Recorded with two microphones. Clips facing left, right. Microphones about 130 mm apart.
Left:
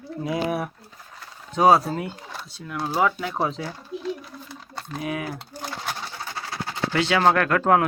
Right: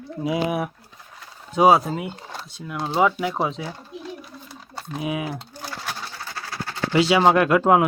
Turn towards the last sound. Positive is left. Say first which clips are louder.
# right 3 dB
turn(degrees=-15)  # may be behind; listen again after turning